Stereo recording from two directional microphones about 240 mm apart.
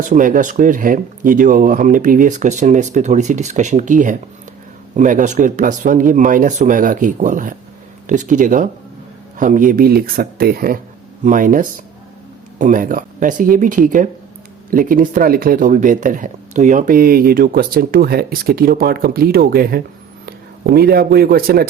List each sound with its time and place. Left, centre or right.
0.0 s speech: right